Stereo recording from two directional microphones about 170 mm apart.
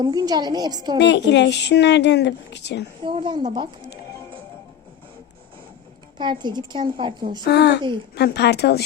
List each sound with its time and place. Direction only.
0.0 s a woman's voice: 25° right (ahead or behind)
0.9 s a woman's voice: 90° left
3.0 s a woman's voice: 30° right (ahead or behind)
6.1 s a woman's voice: 25° right (ahead or behind)
7.4 s speech: 75° left (ahead or behind)